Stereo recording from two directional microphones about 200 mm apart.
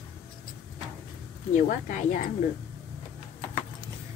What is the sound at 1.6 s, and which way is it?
Speech, 40° left (ahead or behind).